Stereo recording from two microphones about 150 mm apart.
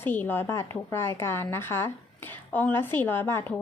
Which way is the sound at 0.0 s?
15° left (ahead or behind).